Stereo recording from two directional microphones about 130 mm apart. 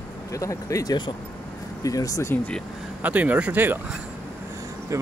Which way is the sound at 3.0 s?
10° right (ahead or behind).